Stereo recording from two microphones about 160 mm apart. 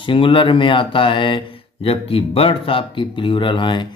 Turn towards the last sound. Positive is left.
turn(degrees=30)  # may be behind; listen again after turning